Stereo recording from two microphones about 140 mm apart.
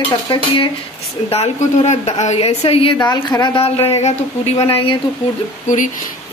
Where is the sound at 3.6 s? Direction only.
45° left (ahead or behind).